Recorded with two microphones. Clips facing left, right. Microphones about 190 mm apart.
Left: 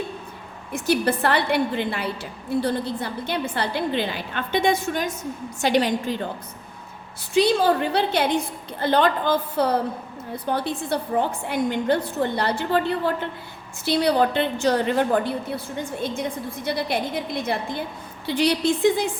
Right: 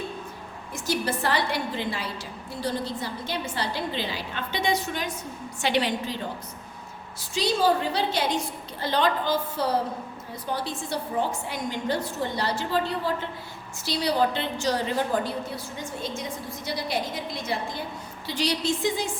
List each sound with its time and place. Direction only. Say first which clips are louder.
0.7 s a woman's voice: left 6 dB; 60° left (ahead or behind); by 6.1 s 45° left (ahead or behind)
7.3 s a woman's voice: left 5 dB; 60° left (ahead or behind)